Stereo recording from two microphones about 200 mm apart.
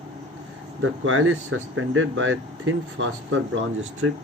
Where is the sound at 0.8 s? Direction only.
90° right; by 3.6 s 70° right (ahead or behind).